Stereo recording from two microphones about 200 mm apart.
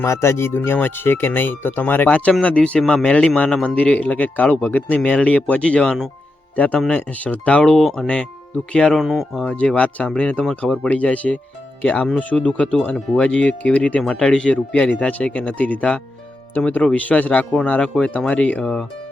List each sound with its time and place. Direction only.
0.0 s speech: 15° left (ahead or behind)